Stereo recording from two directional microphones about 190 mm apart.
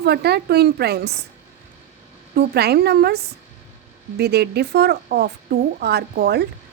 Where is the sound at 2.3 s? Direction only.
55° right (ahead or behind).